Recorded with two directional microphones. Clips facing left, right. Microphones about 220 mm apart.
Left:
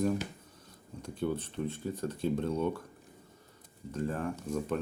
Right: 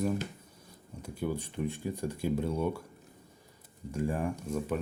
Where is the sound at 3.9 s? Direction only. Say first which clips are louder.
Right 2 dB; 10° right (ahead or behind).